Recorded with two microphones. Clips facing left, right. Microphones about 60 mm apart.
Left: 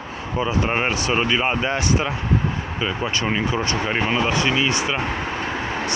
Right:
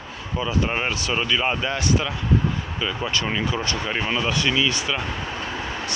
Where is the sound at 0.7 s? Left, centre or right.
Left.